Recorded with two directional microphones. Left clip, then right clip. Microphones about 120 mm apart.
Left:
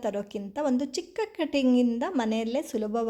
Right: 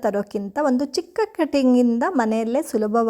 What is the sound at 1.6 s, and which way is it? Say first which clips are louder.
Speech: right 6 dB; 30° right (ahead or behind).